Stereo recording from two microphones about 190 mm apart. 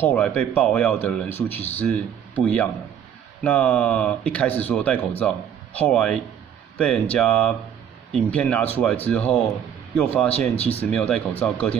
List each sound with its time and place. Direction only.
0.0 s speech: 5° left (ahead or behind)
10.6 s speech: 35° left (ahead or behind)
10.9 s speech: 5° left (ahead or behind)